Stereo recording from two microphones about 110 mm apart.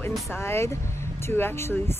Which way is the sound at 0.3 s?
25° left (ahead or behind).